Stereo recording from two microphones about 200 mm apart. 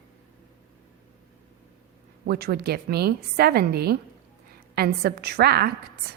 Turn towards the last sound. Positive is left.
turn(degrees=-50)  # may be behind; listen again after turning